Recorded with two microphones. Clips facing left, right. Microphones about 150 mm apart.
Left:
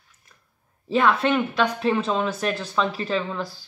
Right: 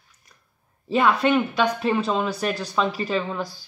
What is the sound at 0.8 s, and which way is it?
Speech, 5° right (ahead or behind).